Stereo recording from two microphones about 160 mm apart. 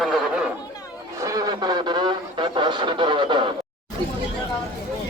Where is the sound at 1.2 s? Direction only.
20° right (ahead or behind).